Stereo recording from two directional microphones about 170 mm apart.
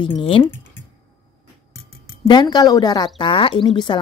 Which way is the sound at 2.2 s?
25° left (ahead or behind).